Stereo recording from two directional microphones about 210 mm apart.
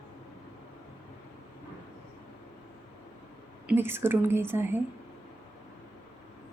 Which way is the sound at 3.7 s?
10° right (ahead or behind).